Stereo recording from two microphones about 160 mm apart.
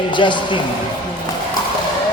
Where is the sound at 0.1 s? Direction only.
30° left (ahead or behind).